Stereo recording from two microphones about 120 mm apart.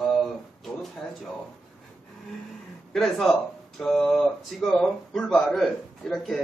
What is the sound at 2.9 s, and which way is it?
Speech, centre (ahead or behind).